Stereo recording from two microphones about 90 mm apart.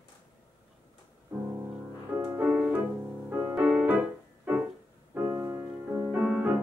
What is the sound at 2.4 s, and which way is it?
Music, 10° right (ahead or behind).